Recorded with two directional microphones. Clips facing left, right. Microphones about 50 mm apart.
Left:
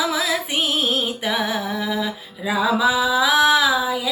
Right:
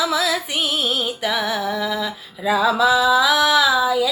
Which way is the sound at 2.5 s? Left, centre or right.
Centre.